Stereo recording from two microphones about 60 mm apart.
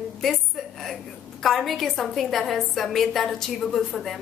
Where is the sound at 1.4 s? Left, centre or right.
Centre.